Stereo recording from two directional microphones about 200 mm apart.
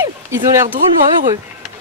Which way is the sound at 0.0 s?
15° right (ahead or behind).